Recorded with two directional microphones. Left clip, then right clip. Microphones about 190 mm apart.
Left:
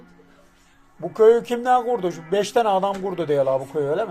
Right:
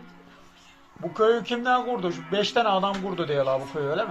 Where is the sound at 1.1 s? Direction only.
35° left (ahead or behind).